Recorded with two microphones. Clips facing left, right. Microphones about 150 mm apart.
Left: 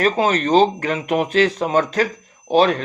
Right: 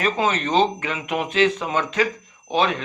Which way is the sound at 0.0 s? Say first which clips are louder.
Left 4 dB; 40° left (ahead or behind).